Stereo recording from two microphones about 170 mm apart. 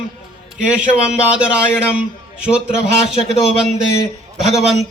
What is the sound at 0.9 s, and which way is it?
A man's voice, 5° right (ahead or behind).